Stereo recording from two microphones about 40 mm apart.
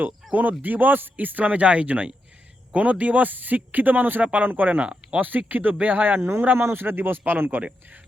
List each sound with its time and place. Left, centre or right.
0.2 s a sound: centre
0.6 s speech: right
4.8 s speech: right
5.2 s speech: right
6.1 s speech: right
6.6 s speech: right